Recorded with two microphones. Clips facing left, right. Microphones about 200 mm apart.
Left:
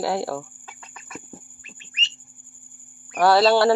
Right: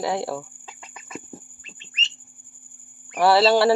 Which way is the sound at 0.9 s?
20° right (ahead or behind).